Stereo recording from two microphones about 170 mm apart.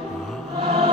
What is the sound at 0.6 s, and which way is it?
Music, 35° right (ahead or behind).